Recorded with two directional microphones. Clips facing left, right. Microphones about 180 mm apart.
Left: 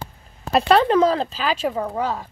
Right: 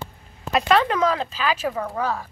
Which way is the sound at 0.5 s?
35° left (ahead or behind).